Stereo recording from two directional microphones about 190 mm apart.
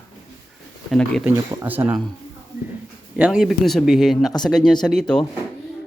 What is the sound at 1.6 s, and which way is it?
Speech, 10° right (ahead or behind).